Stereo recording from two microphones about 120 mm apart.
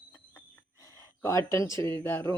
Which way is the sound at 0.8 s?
25° left (ahead or behind).